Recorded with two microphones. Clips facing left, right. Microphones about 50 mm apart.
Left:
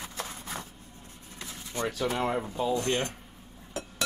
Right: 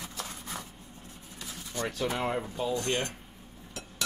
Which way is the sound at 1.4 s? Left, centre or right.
Left.